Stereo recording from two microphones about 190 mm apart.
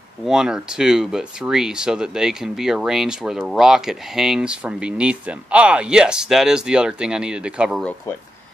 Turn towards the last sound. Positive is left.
turn(degrees=-5)  # may be behind; listen again after turning